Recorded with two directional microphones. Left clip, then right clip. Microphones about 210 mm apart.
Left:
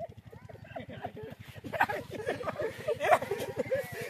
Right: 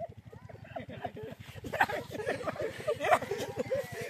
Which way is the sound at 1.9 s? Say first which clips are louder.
Even; 20° right (ahead or behind).